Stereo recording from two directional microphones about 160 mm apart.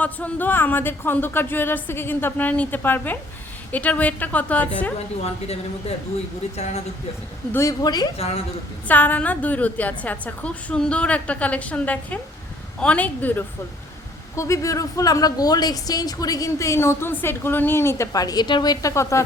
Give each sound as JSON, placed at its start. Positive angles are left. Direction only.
{"t": 0.0, "sound": "a woman's voice", "side_deg": 10}
{"t": 6.6, "sound": "speech", "side_deg": 45}
{"t": 7.5, "sound": "speech", "side_deg": 20}
{"t": 8.9, "sound": "a woman's voice", "side_deg": 10}